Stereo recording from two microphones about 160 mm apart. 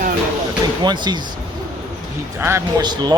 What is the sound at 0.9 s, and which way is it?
Speech, 25° right (ahead or behind).